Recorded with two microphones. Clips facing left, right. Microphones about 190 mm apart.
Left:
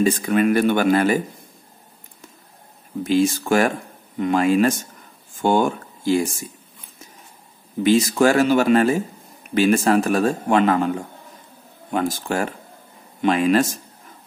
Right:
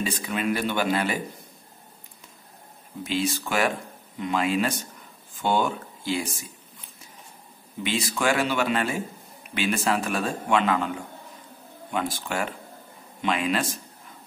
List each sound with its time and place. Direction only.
0.0 s a man's voice: 50° left (ahead or behind)
3.0 s a man's voice: 45° left (ahead or behind)
7.8 s a man's voice: 45° left (ahead or behind)
11.9 s a man's voice: 45° left (ahead or behind)